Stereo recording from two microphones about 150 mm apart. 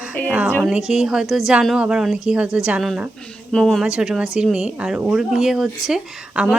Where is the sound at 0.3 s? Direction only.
10° right (ahead or behind).